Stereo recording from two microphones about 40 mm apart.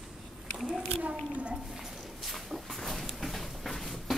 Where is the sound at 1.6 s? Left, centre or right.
Centre.